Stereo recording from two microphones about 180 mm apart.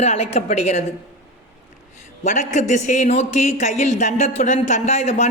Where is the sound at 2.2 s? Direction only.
40° left (ahead or behind).